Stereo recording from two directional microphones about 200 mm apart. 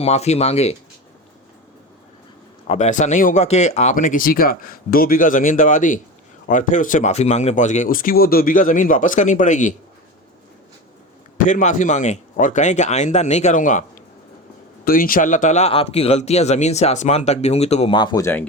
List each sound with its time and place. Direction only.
0.0 s speech: 30° left (ahead or behind)
2.6 s speech: 35° left (ahead or behind)
11.4 s speech: 40° left (ahead or behind)
14.8 s speech: 45° left (ahead or behind); by 18.4 s 15° left (ahead or behind)